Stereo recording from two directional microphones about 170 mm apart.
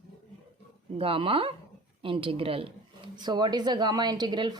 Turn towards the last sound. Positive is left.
turn(degrees=-25)  # may be behind; listen again after turning